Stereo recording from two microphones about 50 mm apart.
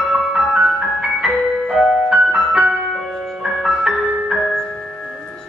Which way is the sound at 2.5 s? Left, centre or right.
Right.